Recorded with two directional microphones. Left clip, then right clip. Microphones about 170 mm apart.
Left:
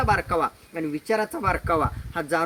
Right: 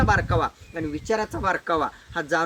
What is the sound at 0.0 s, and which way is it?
Speech, 25° left (ahead or behind).